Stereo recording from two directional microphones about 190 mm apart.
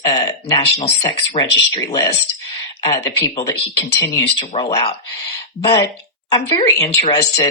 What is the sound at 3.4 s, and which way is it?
Speech, 20° left (ahead or behind).